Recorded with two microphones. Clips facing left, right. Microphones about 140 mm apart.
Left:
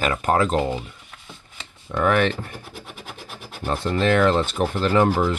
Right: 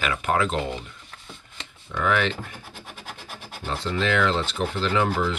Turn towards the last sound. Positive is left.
turn(degrees=40)  # may be behind; listen again after turning